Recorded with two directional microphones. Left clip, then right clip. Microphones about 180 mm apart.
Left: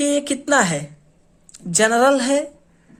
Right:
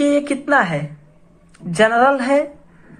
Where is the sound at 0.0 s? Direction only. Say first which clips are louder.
Right 3 dB; 50° left (ahead or behind).